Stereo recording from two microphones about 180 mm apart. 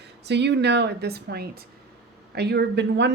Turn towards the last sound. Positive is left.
turn(degrees=-65)  # may be behind; listen again after turning